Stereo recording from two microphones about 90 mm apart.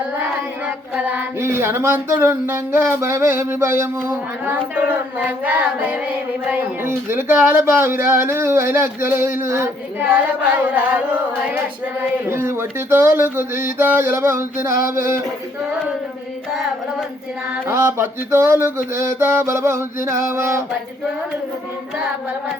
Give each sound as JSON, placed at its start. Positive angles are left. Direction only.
{"t": 0.9, "sound": "singing", "side_deg": -15}
{"t": 1.4, "sound": "speech", "side_deg": -25}
{"t": 10.6, "sound": "singing", "side_deg": -15}
{"t": 12.3, "sound": "speech", "side_deg": -25}
{"t": 17.7, "sound": "speech", "side_deg": -30}